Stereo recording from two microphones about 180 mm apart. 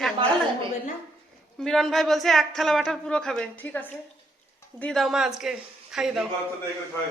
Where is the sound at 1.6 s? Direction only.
Centre (ahead or behind).